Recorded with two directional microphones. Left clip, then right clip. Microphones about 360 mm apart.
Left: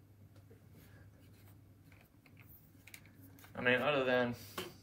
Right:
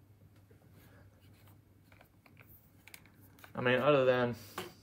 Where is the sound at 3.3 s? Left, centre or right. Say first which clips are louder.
Right 2 dB; centre.